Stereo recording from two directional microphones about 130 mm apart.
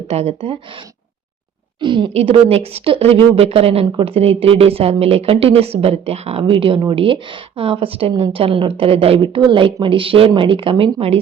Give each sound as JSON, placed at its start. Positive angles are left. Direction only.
{"t": 0.1, "sound": "speech", "side_deg": -55}
{"t": 1.8, "sound": "speech", "side_deg": -40}